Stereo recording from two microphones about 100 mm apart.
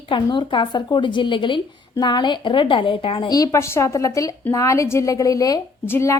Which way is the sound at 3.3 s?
35° left (ahead or behind).